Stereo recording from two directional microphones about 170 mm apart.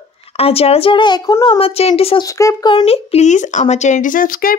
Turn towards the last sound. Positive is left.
turn(degrees=55)  # may be behind; listen again after turning